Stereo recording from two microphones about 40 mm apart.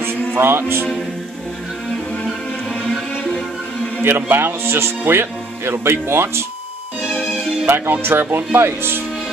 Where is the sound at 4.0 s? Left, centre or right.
Right.